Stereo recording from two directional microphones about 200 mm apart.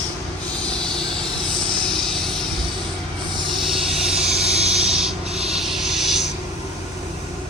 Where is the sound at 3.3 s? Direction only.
20° right (ahead or behind).